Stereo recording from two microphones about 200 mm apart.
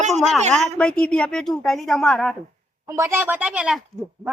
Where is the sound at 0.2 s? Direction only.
Centre (ahead or behind).